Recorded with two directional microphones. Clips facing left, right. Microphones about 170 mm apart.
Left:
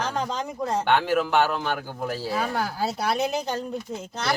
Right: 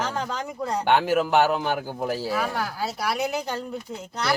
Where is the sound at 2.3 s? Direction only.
30° left (ahead or behind).